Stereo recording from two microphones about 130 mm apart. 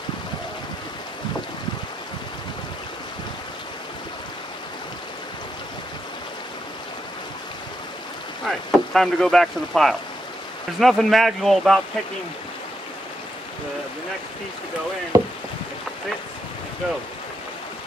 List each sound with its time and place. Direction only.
8.5 s speech: centre (ahead or behind)
15.1 s rowboat: 25° right (ahead or behind)